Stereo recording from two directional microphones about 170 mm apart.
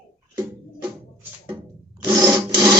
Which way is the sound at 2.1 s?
20° right (ahead or behind).